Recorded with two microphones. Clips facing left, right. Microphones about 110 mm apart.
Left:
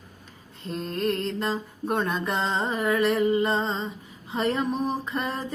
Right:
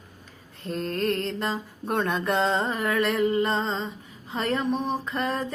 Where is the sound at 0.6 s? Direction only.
Centre (ahead or behind).